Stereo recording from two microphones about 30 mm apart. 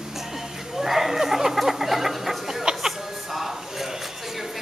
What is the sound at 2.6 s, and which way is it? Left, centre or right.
Music, right.